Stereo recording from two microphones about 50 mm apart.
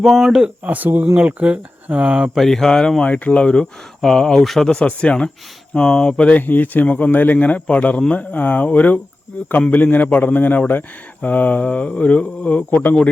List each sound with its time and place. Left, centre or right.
0.0 s speech: centre
0.6 s speech: right
2.3 s speech: centre
3.0 s speech: left
3.4 s speech: centre
6.4 s a man's voice: left
6.8 s a man's voice: left